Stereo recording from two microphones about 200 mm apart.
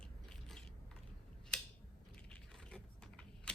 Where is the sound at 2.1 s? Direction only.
5° left (ahead or behind).